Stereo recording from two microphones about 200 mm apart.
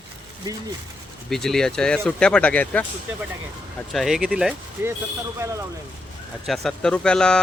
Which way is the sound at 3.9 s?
Centre (ahead or behind).